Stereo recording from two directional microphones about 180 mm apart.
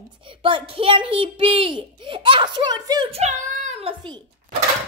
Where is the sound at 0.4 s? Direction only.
30° right (ahead or behind).